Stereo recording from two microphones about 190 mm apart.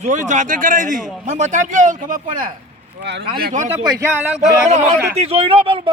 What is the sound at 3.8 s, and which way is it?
Speech, 15° right (ahead or behind).